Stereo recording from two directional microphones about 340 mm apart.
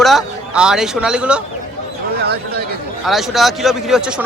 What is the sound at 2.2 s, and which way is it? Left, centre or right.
Speech, right.